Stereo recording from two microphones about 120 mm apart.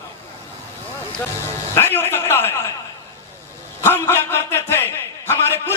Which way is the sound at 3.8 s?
20° left (ahead or behind).